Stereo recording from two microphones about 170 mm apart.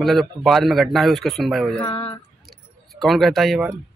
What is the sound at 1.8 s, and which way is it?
Speech, 35° left (ahead or behind).